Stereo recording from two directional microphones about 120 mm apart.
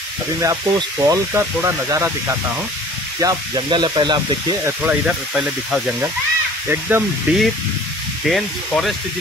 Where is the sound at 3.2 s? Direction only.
35° right (ahead or behind).